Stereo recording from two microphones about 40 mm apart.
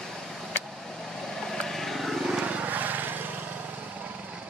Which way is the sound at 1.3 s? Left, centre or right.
Centre.